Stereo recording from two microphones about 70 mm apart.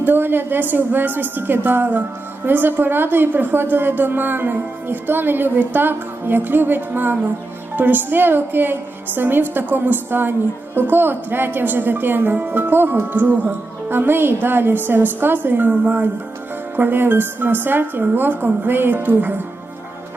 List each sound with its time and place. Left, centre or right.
0.0 s a woman's voice: right